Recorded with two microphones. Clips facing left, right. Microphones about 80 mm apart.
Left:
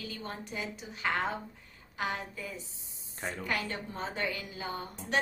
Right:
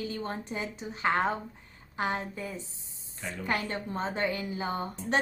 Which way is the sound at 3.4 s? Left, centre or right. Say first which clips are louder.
Right 5 dB; right.